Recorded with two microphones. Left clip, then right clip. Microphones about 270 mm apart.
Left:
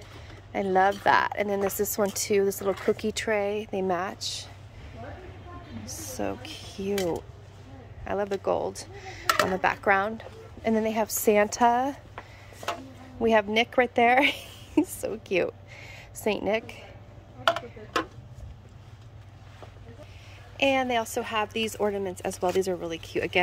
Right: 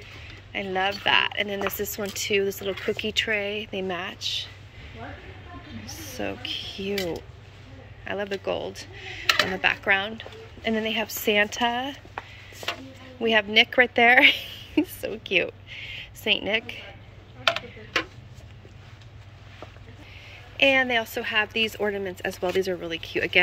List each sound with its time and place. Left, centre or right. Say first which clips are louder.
0.6 s speech: left 3 dB; left
5.9 s speech: even; centre
13.2 s a woman's voice: right 3 dB; centre
20.5 s speech: right 4 dB; centre